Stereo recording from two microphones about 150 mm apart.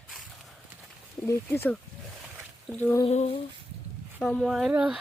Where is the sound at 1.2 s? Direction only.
15° left (ahead or behind).